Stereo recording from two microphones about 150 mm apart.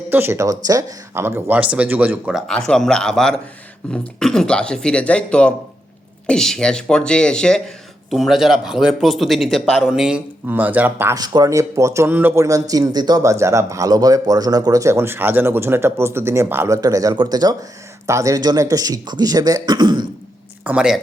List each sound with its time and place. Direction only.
0.1 s speech: 15° right (ahead or behind)
2.5 s speech: 5° left (ahead or behind); by 11.2 s 15° right (ahead or behind)
11.2 s speech: 25° right (ahead or behind)
20.7 s speech: 5° right (ahead or behind)